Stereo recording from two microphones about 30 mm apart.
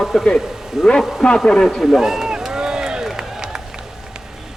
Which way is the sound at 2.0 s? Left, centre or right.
Centre.